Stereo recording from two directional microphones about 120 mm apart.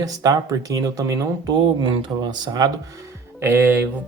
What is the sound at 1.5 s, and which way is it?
Speech, 40° right (ahead or behind).